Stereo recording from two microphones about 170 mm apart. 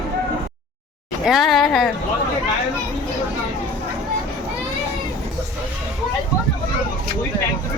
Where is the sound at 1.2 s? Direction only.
Centre (ahead or behind).